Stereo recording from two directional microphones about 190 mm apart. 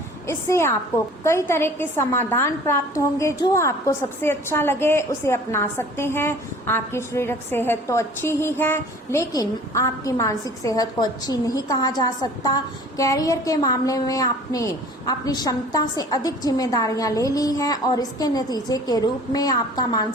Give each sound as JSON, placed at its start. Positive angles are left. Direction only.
{"t": 0.3, "sound": "a woman's voice", "side_deg": 15}